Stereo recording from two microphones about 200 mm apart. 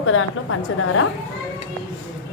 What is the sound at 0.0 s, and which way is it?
A woman's voice, 90° left.